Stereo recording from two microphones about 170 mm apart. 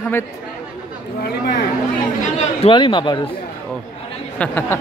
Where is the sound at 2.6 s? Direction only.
30° left (ahead or behind).